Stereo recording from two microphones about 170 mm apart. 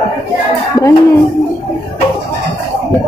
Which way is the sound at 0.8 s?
20° left (ahead or behind).